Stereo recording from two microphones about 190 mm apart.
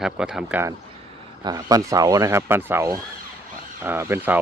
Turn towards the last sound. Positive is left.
turn(degrees=-10)  # may be behind; listen again after turning